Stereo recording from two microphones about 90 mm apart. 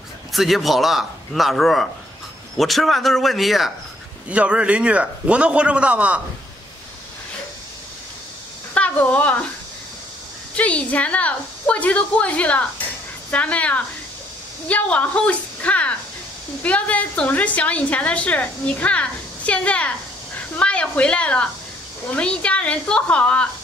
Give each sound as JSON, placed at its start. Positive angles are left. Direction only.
{"t": 0.3, "sound": "speech", "side_deg": 0}
{"t": 4.3, "sound": "a man's voice", "side_deg": -15}
{"t": 8.7, "sound": "a woman's voice", "side_deg": 15}
{"t": 10.5, "sound": "a woman's voice", "side_deg": 15}